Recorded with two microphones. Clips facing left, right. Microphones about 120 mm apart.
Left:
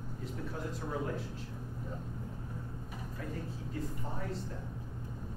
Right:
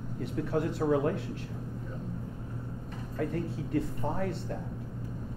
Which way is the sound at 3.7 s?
70° right (ahead or behind).